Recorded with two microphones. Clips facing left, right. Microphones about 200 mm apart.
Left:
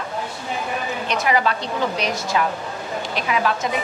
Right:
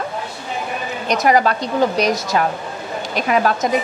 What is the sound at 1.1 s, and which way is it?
Speech, 40° right (ahead or behind).